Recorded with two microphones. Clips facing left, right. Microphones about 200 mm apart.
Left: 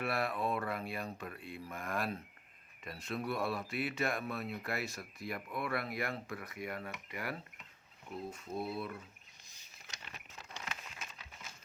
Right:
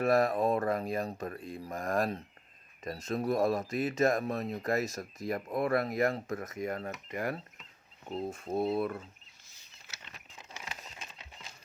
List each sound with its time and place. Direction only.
0.0 s speech: 40° right (ahead or behind)
8.7 s speech: 50° right (ahead or behind)
10.3 s a sound: 15° right (ahead or behind)